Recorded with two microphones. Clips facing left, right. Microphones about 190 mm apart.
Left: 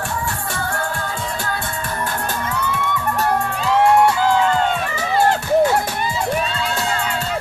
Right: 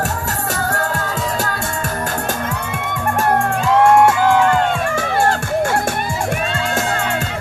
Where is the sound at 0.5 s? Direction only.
40° right (ahead or behind).